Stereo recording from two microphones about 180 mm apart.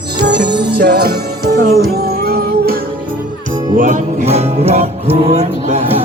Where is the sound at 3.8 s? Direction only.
45° right (ahead or behind).